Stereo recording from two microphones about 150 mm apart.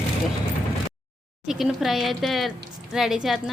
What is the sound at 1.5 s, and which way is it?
Speech, centre (ahead or behind).